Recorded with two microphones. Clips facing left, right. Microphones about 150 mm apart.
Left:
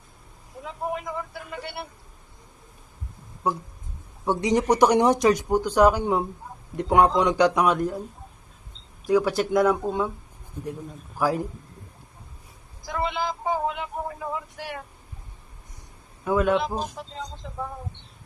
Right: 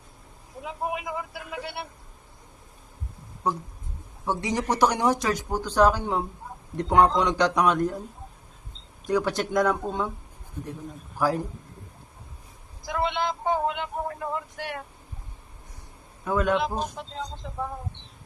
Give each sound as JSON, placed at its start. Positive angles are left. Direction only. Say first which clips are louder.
{"t": 0.6, "sound": "a man's voice", "louder": "even", "side_deg": -10}
{"t": 4.3, "sound": "speech", "louder": "left 5 dB", "side_deg": 20}
{"t": 9.0, "sound": "speech", "louder": "left 4 dB", "side_deg": 5}
{"t": 12.8, "sound": "speech", "louder": "right 1 dB", "side_deg": 0}
{"t": 16.2, "sound": "speech", "louder": "left 2 dB", "side_deg": 10}